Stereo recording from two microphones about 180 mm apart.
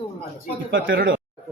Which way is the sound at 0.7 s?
55° right (ahead or behind).